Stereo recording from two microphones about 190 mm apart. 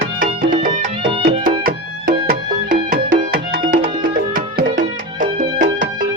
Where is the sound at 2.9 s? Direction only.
50° right (ahead or behind).